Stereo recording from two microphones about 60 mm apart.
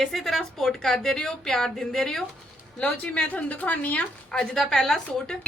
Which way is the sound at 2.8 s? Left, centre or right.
Left.